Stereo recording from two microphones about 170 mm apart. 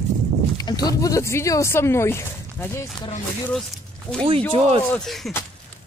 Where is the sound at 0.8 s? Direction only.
20° left (ahead or behind).